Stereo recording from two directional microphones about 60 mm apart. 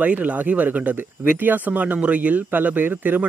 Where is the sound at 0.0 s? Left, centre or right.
Right.